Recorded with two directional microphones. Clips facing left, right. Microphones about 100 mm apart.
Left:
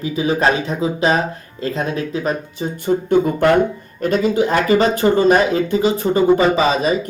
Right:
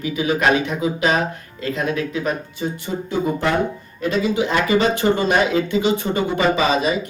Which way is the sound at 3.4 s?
55° left (ahead or behind).